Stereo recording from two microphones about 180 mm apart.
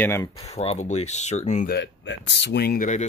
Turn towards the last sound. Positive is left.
turn(degrees=45)  # may be behind; listen again after turning